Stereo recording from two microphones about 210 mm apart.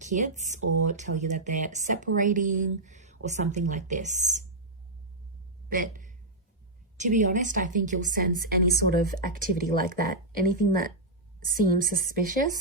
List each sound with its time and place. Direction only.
0.0 s a woman's voice: 35° right (ahead or behind)
5.7 s a sound: 40° right (ahead or behind)
6.9 s a woman's voice: 35° right (ahead or behind)